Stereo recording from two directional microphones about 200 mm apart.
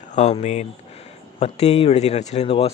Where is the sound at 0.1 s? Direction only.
35° left (ahead or behind).